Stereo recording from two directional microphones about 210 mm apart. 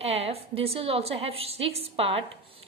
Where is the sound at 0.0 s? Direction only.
30° right (ahead or behind).